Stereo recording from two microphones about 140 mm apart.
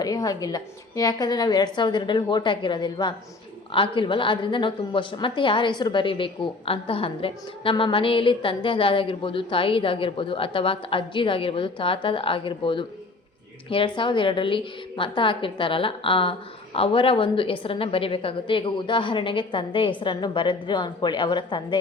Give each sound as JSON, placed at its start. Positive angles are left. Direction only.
{"t": 0.0, "sound": "a woman's voice", "side_deg": 25}